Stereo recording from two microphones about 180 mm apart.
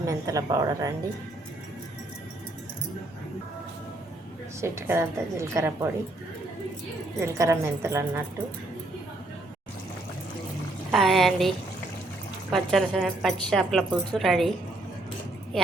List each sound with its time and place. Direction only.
0.0 s a woman's voice: 20° right (ahead or behind)
4.6 s a woman's voice: 15° right (ahead or behind)
7.2 s a woman's voice: 15° right (ahead or behind)
10.9 s speech: centre (ahead or behind)